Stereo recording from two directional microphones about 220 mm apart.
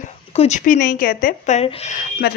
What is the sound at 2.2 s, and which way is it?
Speech, 45° left (ahead or behind).